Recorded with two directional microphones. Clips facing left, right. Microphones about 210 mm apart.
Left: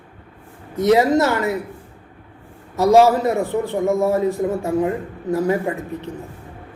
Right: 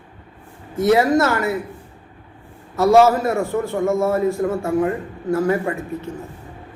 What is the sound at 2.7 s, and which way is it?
A man's voice, 15° left (ahead or behind).